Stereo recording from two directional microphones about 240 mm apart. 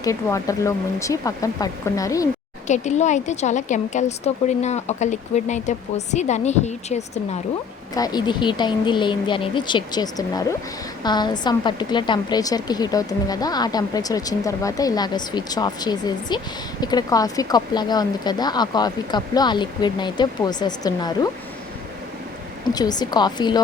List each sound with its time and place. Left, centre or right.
0.0 s a woman's voice: centre
2.6 s a woman's voice: left
7.9 s a woman's voice: centre
22.6 s a woman's voice: centre